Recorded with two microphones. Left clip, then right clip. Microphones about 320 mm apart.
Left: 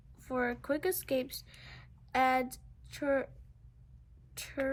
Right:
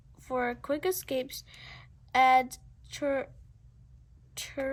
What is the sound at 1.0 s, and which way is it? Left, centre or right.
Speech, right.